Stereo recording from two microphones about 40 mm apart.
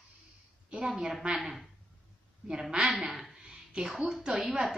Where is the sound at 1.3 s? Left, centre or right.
Centre.